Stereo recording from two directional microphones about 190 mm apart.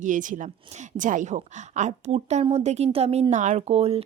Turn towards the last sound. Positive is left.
turn(degrees=-30)  # may be behind; listen again after turning